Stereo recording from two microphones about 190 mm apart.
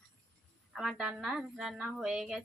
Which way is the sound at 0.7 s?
Centre (ahead or behind).